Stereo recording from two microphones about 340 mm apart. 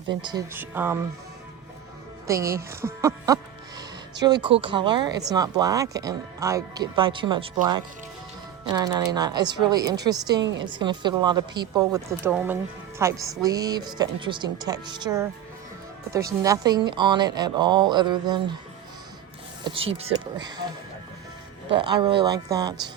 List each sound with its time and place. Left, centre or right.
0.2 s speech: centre
2.2 s speech: centre
19.6 s speech: centre
21.7 s speech: centre